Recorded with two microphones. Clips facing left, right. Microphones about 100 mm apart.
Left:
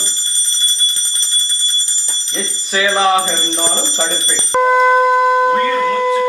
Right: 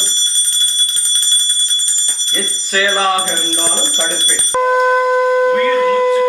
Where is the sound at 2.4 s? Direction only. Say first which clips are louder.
Even; 15° left (ahead or behind).